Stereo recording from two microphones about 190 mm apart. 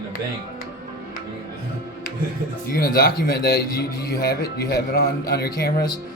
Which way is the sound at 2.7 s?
55° left (ahead or behind).